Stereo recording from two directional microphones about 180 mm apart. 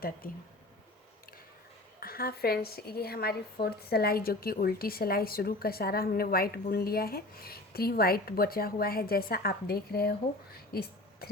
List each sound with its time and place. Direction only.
0.2 s speech: 55° left (ahead or behind)
2.0 s speech: 55° left (ahead or behind)